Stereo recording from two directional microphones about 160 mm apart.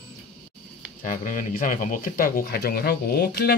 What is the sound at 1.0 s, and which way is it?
Speech, 55° left (ahead or behind).